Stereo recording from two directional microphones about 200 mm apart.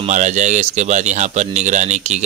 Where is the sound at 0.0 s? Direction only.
35° right (ahead or behind).